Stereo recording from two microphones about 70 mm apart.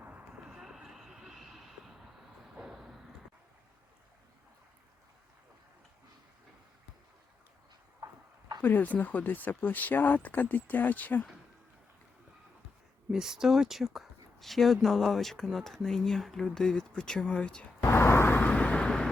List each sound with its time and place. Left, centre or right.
0.0 s vehicle: right
0.5 s vehicle: centre
8.6 s speech: left
13.1 s speech: centre
17.8 s a sound: left
18.4 s vehicle: centre